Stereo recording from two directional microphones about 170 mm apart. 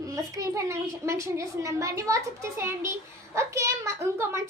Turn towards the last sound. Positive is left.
turn(degrees=-15)  # may be behind; listen again after turning